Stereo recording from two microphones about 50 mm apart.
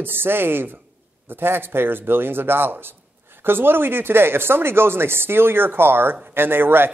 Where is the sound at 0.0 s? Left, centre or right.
Right.